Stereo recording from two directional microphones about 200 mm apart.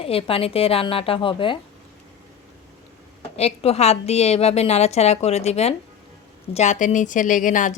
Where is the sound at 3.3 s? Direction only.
30° left (ahead or behind).